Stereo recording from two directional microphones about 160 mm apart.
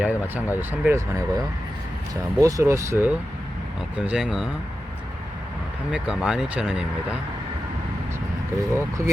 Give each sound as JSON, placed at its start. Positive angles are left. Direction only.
{"t": 0.0, "sound": "speech", "side_deg": -10}
{"t": 2.4, "sound": "speech", "side_deg": -20}
{"t": 3.9, "sound": "speech", "side_deg": -5}
{"t": 5.9, "sound": "speech", "side_deg": -5}
{"t": 8.7, "sound": "speech", "side_deg": -15}